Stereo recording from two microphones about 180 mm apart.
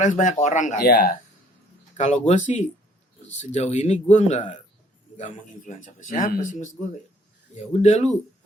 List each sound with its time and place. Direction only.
0.0 s speech: 45° left (ahead or behind)
2.0 s a man's voice: 40° left (ahead or behind)